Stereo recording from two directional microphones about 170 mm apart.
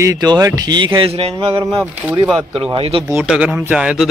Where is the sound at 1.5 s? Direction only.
10° right (ahead or behind).